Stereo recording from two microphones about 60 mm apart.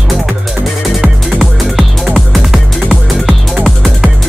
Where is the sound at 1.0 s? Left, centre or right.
Centre.